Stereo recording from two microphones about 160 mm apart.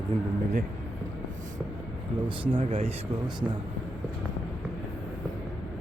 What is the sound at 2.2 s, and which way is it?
Speech, 35° right (ahead or behind).